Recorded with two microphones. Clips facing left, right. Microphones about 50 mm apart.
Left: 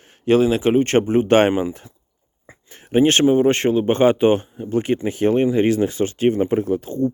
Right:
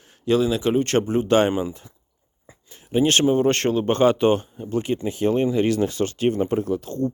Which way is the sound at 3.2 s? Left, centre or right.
Centre.